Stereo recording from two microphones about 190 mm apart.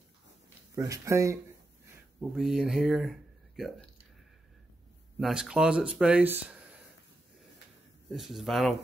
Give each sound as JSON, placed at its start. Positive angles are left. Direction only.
{"t": 0.7, "sound": "speech", "side_deg": -15}
{"t": 2.1, "sound": "speech", "side_deg": -5}
{"t": 5.2, "sound": "speech", "side_deg": -5}
{"t": 8.1, "sound": "speech", "side_deg": 0}